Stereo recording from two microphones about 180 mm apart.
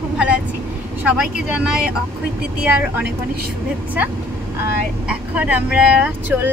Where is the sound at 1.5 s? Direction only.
5° right (ahead or behind).